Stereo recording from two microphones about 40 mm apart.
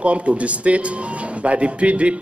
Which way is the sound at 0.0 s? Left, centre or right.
Right.